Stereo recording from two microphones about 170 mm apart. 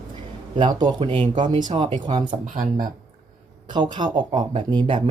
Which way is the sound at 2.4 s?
50° right (ahead or behind).